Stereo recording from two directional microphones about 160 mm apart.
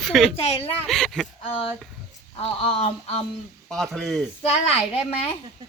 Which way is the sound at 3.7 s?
Centre (ahead or behind).